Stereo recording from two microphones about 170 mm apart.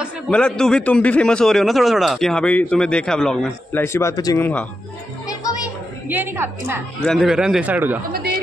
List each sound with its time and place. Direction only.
0.3 s a man's voice: 5° left (ahead or behind)
3.8 s speech: 15° left (ahead or behind)
5.2 s music: 20° left (ahead or behind)
6.0 s a woman's voice: 10° right (ahead or behind)
7.0 s a man's voice: centre (ahead or behind)
8.1 s a sound: 65° right (ahead or behind)